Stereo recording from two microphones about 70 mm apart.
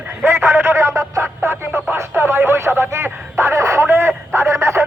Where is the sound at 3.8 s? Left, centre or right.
Right.